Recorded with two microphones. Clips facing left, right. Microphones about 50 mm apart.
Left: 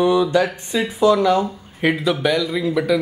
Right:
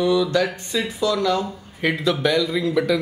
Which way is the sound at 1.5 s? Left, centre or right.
Centre.